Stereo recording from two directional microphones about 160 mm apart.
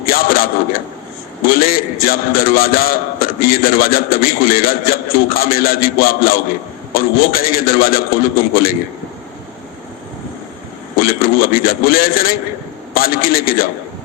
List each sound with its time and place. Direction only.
0.0 s a sound: 65° left (ahead or behind)
1.5 s a man's voice: 65° left (ahead or behind)
10.9 s a man's voice: 65° left (ahead or behind)